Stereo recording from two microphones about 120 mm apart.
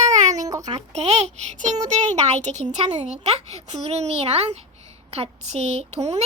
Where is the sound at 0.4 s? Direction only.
30° right (ahead or behind).